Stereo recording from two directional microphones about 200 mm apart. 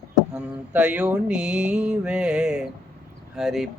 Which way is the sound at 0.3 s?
5° right (ahead or behind).